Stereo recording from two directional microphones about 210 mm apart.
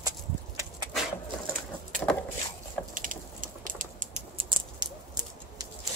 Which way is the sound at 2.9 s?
40° right (ahead or behind).